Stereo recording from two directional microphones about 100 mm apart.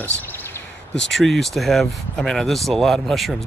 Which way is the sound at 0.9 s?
Centre (ahead or behind).